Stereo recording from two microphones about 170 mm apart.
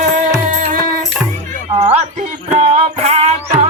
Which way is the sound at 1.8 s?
40° right (ahead or behind).